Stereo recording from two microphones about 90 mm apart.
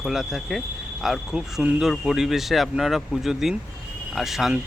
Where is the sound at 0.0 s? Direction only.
5° right (ahead or behind).